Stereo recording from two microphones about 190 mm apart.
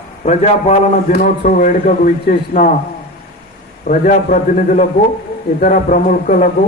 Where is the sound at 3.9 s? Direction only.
40° left (ahead or behind).